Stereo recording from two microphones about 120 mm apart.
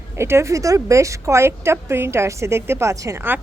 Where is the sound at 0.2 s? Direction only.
20° right (ahead or behind).